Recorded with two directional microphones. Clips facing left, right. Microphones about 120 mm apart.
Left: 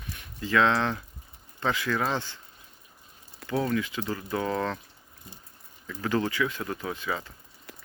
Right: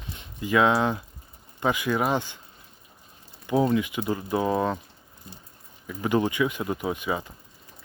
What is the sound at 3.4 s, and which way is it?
Speech, 20° right (ahead or behind).